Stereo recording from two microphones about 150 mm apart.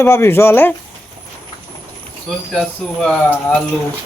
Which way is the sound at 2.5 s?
5° left (ahead or behind).